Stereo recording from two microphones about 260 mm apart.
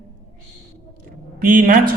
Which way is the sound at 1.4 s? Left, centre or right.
Right.